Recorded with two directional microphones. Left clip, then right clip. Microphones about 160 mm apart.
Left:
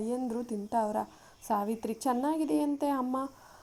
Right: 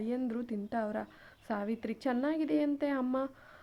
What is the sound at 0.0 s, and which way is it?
A woman's voice, 35° right (ahead or behind).